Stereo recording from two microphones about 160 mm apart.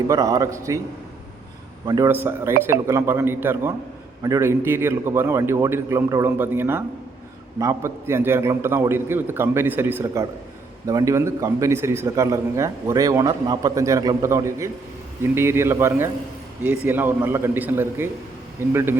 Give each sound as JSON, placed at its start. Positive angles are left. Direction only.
{"t": 0.1, "sound": "a man's voice", "side_deg": -20}
{"t": 1.9, "sound": "a man's voice", "side_deg": -15}